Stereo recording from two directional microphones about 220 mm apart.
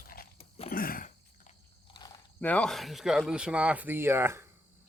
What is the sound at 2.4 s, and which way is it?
Speech, 5° left (ahead or behind).